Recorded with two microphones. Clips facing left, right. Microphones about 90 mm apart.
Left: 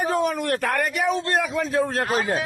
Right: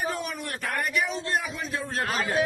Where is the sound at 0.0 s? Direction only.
45° left (ahead or behind).